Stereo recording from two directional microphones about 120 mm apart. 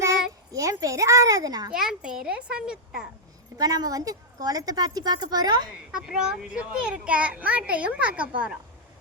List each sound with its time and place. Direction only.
0.0 s a child's voice: 25° right (ahead or behind)
1.7 s a child's voice: 5° right (ahead or behind)
3.6 s a woman's voice: 30° right (ahead or behind)
5.9 s a child's voice: 5° right (ahead or behind)